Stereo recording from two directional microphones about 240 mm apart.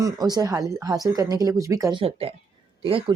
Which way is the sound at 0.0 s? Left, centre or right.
Centre.